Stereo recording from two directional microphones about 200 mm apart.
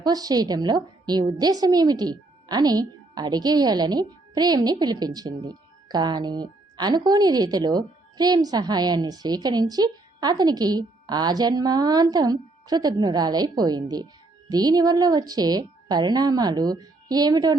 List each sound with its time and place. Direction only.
0.0 s a woman's voice: 20° right (ahead or behind)